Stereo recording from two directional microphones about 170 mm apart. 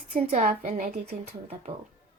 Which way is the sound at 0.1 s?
45° right (ahead or behind).